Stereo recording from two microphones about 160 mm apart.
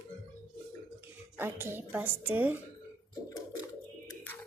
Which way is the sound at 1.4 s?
15° right (ahead or behind).